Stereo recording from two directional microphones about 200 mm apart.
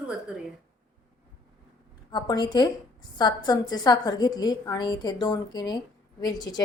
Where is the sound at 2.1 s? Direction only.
20° left (ahead or behind).